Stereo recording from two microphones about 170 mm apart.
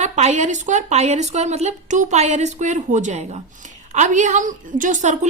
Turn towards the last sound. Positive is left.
turn(degrees=-45)  # may be behind; listen again after turning